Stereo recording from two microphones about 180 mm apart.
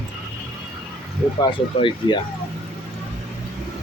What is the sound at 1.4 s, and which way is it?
Speech, 25° left (ahead or behind).